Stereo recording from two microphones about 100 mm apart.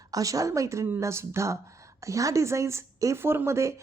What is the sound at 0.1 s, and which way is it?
A woman's voice, 35° right (ahead or behind).